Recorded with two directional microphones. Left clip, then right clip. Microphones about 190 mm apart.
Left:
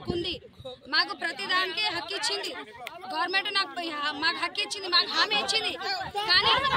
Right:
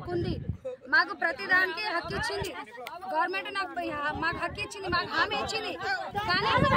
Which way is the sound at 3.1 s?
10° right (ahead or behind).